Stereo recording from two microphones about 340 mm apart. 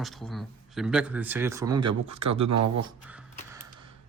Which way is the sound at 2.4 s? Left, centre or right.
Right.